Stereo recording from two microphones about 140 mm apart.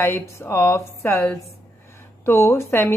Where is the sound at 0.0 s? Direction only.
20° left (ahead or behind).